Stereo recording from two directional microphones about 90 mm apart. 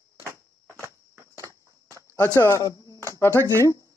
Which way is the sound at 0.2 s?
30° right (ahead or behind).